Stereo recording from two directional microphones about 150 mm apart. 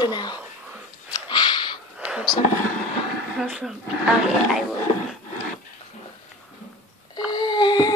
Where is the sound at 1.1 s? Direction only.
30° left (ahead or behind).